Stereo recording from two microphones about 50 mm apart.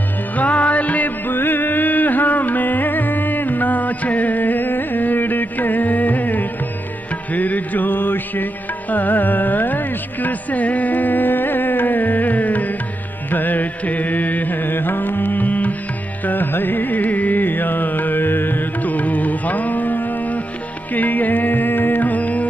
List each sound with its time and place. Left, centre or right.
0.4 s music: left